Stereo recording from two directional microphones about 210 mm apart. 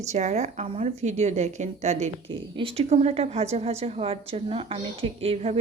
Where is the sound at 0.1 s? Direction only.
35° right (ahead or behind).